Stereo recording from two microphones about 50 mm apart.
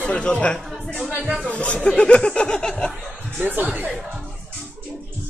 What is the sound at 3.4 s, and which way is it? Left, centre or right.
Speech, right.